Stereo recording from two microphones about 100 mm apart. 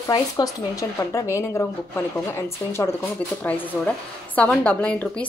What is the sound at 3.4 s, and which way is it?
A woman's voice, 15° left (ahead or behind).